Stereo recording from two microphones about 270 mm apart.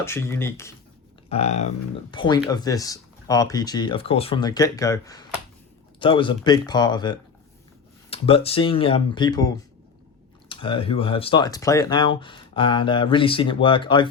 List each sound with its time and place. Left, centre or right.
0.0 s speech: centre
1.3 s speech: left